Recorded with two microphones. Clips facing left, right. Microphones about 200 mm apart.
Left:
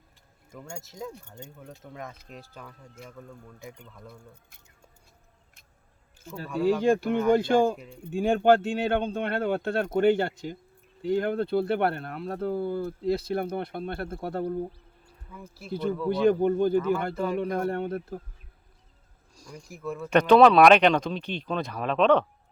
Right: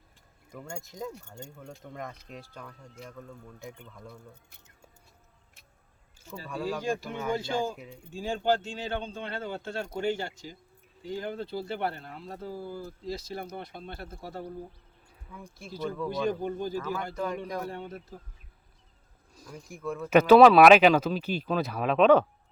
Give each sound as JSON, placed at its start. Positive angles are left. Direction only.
{"t": 0.5, "sound": "speech", "side_deg": 5}
{"t": 6.5, "sound": "speech", "side_deg": 0}
{"t": 6.8, "sound": "speech", "side_deg": 60}
{"t": 15.3, "sound": "speech", "side_deg": 5}
{"t": 16.0, "sound": "speech", "side_deg": 60}
{"t": 19.3, "sound": "speech", "side_deg": -5}